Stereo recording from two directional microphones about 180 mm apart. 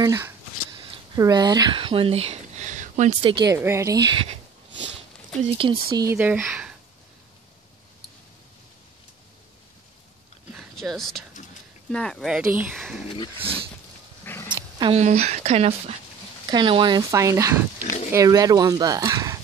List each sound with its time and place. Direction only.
0.0 s speech: 15° right (ahead or behind)
3.5 s speech: 15° right (ahead or behind)
5.6 s speech: 25° right (ahead or behind)
6.1 s speech: 10° right (ahead or behind)
10.5 s a sound: centre (ahead or behind)
11.9 s speech: 5° left (ahead or behind)
12.4 s speech: 10° right (ahead or behind)
13.4 s speech: 30° right (ahead or behind)
14.2 s dog: 15° left (ahead or behind)
14.5 s dog: 25° right (ahead or behind)
15.0 s speech: 40° right (ahead or behind); by 19.3 s 20° right (ahead or behind)